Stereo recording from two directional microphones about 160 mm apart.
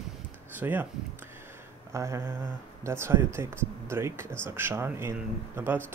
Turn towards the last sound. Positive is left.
turn(degrees=-15)  # may be behind; listen again after turning